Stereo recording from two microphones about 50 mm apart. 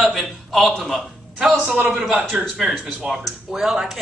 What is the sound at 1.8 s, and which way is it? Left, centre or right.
A woman's voice, centre.